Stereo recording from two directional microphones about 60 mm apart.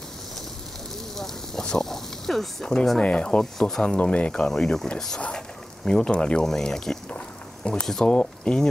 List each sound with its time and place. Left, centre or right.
1.1 s speech: centre
7.1 s a sound: left
7.8 s speech: centre